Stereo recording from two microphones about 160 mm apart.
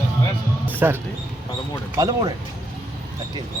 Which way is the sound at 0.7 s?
10° right (ahead or behind).